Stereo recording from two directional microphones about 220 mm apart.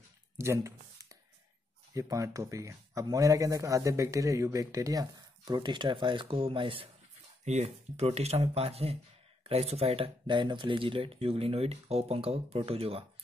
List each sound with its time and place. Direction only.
0.4 s speech: 15° right (ahead or behind)